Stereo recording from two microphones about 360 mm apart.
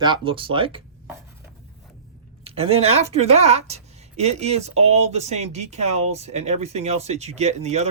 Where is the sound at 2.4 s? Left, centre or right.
Centre.